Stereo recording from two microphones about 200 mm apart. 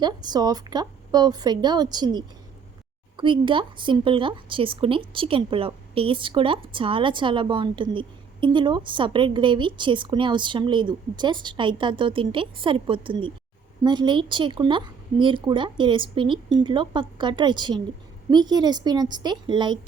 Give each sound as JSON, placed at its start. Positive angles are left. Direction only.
{"t": 0.0, "sound": "speech", "side_deg": -20}